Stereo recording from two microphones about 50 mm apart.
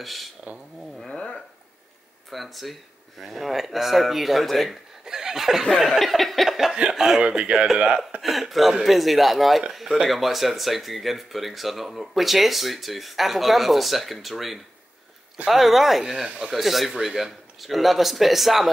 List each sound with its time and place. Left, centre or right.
0.0 s speech: centre
0.9 s speech: centre
2.3 s speech: centre
5.0 s snicker: centre
6.7 s speech: centre
8.2 s speech: centre
16.3 s speech: right
16.5 s speech: centre